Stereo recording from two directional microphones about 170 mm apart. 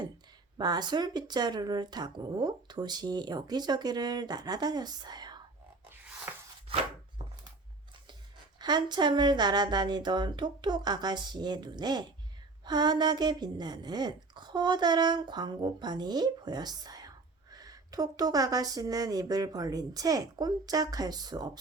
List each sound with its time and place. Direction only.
0.6 s speech: 25° right (ahead or behind)
5.9 s music: 10° right (ahead or behind)
7.2 s a sound: 30° right (ahead or behind)
8.5 s speech: 25° right (ahead or behind)